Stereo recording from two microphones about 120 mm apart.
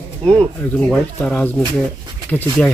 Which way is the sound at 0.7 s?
10° left (ahead or behind).